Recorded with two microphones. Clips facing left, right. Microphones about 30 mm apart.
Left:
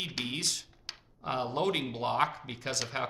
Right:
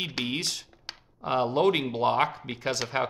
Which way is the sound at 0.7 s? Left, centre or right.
Centre.